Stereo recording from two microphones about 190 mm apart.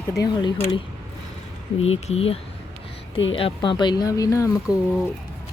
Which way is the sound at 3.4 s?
25° left (ahead or behind).